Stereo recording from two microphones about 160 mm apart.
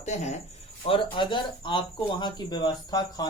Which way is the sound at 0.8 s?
30° left (ahead or behind).